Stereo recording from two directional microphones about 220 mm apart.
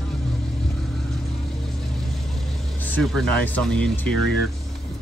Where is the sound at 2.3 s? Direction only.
5° left (ahead or behind).